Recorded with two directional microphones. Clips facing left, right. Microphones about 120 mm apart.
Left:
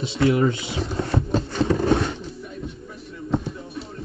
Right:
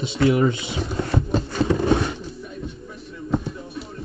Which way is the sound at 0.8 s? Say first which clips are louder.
Even; centre (ahead or behind).